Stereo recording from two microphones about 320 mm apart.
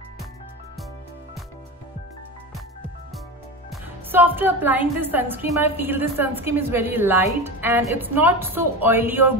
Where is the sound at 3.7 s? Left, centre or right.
Centre.